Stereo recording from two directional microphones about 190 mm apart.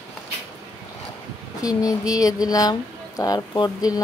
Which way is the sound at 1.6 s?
20° left (ahead or behind).